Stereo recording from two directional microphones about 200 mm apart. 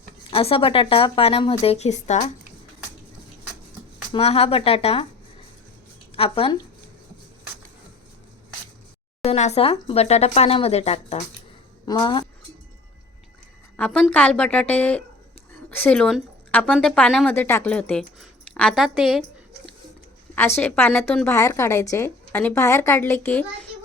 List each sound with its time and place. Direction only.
0.3 s speech: 30° left (ahead or behind)
4.1 s speech: 30° left (ahead or behind)
6.1 s speech: 30° left (ahead or behind)
9.2 s speech: 35° left (ahead or behind)
11.9 s speech: 20° left (ahead or behind)
13.7 s a woman's voice: 5° left (ahead or behind)
20.6 s a woman's voice: 10° left (ahead or behind)